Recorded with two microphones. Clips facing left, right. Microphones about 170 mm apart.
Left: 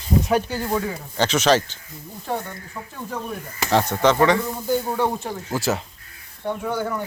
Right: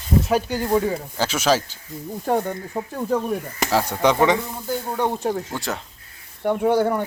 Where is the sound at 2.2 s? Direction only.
50° right (ahead or behind).